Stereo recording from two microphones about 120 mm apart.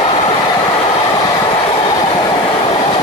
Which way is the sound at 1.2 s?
40° left (ahead or behind).